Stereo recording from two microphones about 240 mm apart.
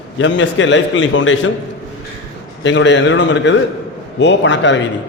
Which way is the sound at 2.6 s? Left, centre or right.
Left.